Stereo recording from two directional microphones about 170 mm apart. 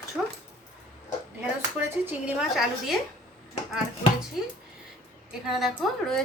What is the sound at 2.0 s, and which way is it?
Speech, 5° right (ahead or behind).